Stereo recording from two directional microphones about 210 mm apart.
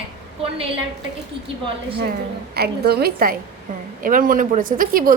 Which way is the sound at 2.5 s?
50° right (ahead or behind).